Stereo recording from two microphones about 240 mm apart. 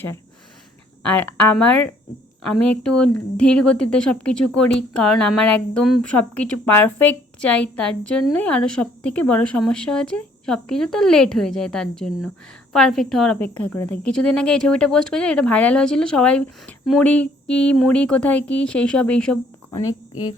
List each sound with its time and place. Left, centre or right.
1.0 s a woman's voice: centre
19.9 s speech: centre